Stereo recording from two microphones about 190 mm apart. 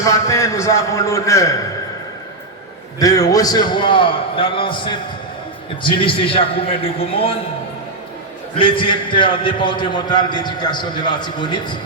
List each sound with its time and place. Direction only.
0.0 s a man's voice: 15° left (ahead or behind)
3.0 s a man's voice: 20° left (ahead or behind)
8.5 s a man's voice: 25° left (ahead or behind)